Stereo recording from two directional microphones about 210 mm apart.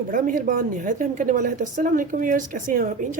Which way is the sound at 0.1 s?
40° right (ahead or behind).